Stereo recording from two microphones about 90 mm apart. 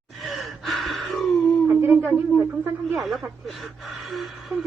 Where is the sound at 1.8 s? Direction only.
25° right (ahead or behind).